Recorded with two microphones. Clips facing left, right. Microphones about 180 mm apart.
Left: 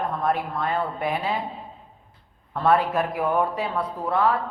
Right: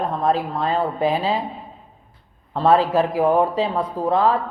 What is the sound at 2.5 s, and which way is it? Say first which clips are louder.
A man's voice: right 4 dB; 25° right (ahead or behind).